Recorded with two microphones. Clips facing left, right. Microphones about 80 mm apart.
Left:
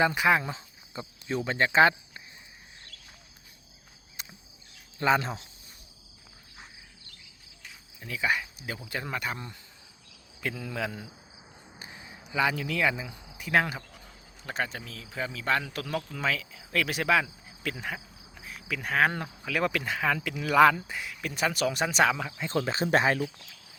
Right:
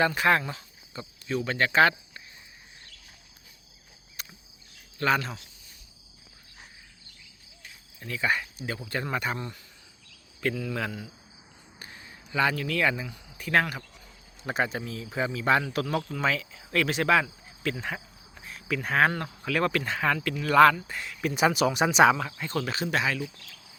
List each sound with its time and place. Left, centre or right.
0.0 s speech: centre
4.2 s cricket: left
4.9 s speech: left
7.9 s speech: centre
10.4 s speech: centre
11.8 s a sound: centre
13.1 s speech: centre
14.4 s speech: centre
21.2 s speech: centre
22.2 s speech: centre
22.4 s speech: left